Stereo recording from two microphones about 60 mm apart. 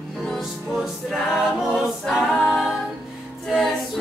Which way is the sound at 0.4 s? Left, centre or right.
Centre.